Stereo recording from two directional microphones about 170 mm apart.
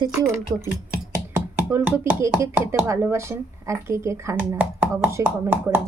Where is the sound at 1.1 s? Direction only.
15° right (ahead or behind).